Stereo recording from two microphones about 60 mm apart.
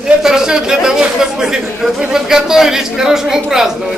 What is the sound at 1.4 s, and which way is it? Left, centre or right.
A man's voice, centre.